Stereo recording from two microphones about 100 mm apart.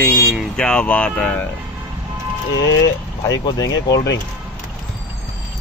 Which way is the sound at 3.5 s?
40° left (ahead or behind).